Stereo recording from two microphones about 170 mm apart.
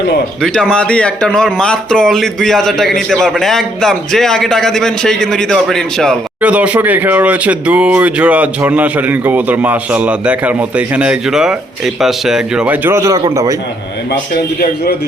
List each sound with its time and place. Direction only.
0.4 s speech: 5° left (ahead or behind)
6.4 s a man's voice: 10° right (ahead or behind)